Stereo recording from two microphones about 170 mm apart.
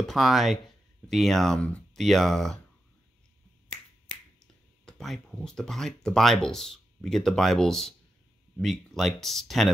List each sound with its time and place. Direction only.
0.1 s speech: centre (ahead or behind)
4.8 s speech: centre (ahead or behind)